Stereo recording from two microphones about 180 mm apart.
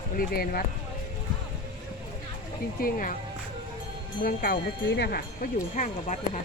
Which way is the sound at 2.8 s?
50° left (ahead or behind).